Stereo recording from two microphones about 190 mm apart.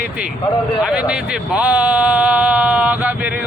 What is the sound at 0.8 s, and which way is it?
Speech, 5° right (ahead or behind).